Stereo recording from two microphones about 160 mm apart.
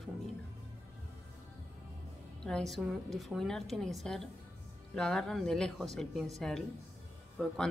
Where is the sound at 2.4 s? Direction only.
5° left (ahead or behind).